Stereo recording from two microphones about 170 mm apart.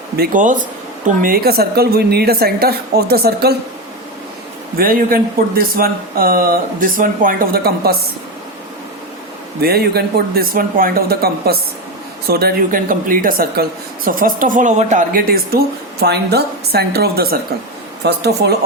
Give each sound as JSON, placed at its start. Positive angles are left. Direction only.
{"t": 0.2, "sound": "speech", "side_deg": -50}
{"t": 4.8, "sound": "speech", "side_deg": -55}
{"t": 9.6, "sound": "speech", "side_deg": -65}